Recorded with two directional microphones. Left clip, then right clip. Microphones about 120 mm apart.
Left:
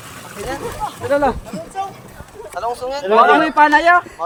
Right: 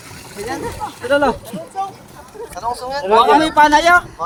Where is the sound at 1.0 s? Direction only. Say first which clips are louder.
Right 1 dB; 70° right (ahead or behind).